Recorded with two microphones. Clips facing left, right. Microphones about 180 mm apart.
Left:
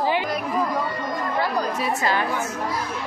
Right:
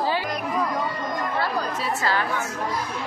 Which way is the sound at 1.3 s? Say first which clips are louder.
Left 4 dB; 15° left (ahead or behind).